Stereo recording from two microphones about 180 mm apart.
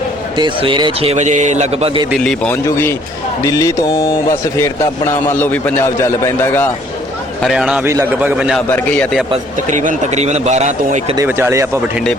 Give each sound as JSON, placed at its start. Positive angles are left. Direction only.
{"t": 0.3, "sound": "speech", "side_deg": -25}
{"t": 2.5, "sound": "a man's voice", "side_deg": 15}
{"t": 7.4, "sound": "a man's voice", "side_deg": -5}
{"t": 8.5, "sound": "a man's voice", "side_deg": 10}
{"t": 9.6, "sound": "speech", "side_deg": -45}
{"t": 11.2, "sound": "speech", "side_deg": -15}